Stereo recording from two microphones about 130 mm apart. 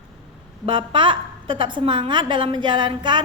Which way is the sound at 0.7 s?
40° right (ahead or behind).